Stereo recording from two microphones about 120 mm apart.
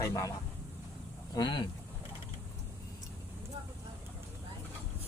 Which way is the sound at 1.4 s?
40° left (ahead or behind).